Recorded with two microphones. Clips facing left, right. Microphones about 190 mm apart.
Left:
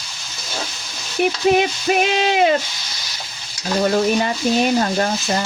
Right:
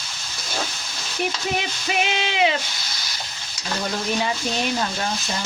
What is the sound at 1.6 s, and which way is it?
Stir, 45° left (ahead or behind).